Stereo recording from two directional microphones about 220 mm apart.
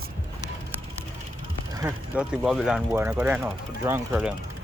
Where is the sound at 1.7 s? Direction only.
15° right (ahead or behind).